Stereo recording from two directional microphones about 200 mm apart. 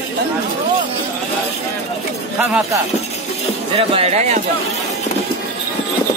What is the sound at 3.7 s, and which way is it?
Speech, 30° right (ahead or behind).